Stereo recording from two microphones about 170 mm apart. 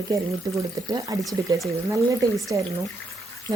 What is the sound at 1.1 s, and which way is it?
Speech, 20° right (ahead or behind).